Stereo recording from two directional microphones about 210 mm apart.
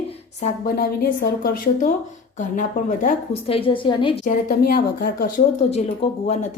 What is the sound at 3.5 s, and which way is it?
Speech, 25° left (ahead or behind).